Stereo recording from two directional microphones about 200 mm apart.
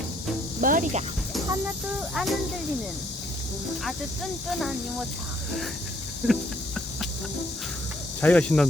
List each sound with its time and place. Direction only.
0.6 s speech: 40° right (ahead or behind)
1.5 s speech: 10° right (ahead or behind)
3.8 s speech: centre (ahead or behind)
8.2 s speech: 5° left (ahead or behind)